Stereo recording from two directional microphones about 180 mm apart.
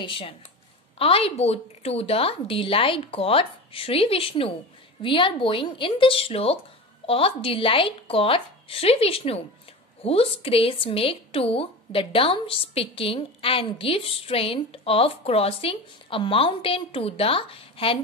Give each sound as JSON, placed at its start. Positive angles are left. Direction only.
{"t": 0.0, "sound": "a woman's voice", "side_deg": 30}